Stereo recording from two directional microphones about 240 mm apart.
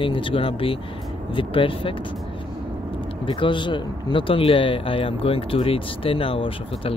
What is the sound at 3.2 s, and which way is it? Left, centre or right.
Speech, left.